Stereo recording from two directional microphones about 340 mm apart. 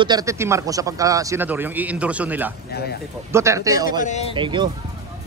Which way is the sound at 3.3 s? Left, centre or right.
Centre.